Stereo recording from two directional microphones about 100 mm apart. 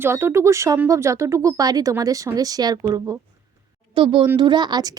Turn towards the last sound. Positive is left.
turn(degrees=-45)  # may be behind; listen again after turning